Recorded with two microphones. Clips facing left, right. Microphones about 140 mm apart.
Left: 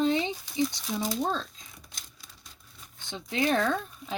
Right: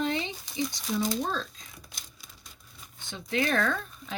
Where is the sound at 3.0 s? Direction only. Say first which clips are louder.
Left 1 dB; 20° left (ahead or behind).